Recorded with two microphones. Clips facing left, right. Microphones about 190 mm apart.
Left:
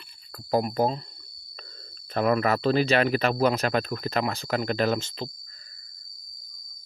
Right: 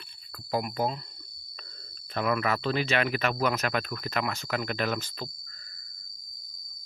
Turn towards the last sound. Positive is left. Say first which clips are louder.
# left 4 dB
turn(degrees=20)  # may be behind; listen again after turning